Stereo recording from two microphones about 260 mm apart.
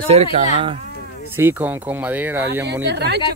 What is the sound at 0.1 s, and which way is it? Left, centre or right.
Speech, right.